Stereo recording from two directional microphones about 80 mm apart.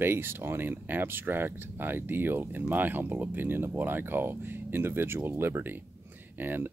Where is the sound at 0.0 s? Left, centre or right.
Right.